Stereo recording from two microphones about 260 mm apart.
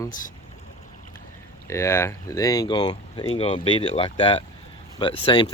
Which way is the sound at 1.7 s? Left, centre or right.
Centre.